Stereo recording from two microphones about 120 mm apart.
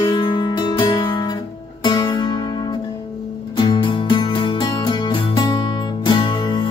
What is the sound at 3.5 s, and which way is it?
Music, 40° left (ahead or behind).